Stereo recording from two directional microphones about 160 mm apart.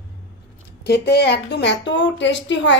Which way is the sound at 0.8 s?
90° left.